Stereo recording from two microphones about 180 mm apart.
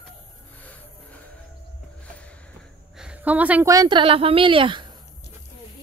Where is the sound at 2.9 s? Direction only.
5° right (ahead or behind); by 4.9 s 30° right (ahead or behind).